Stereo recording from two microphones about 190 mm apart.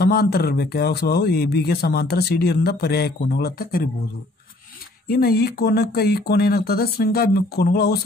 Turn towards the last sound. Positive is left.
turn(degrees=55)  # may be behind; listen again after turning